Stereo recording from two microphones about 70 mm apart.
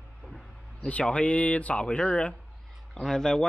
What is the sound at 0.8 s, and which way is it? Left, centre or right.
Speech, centre.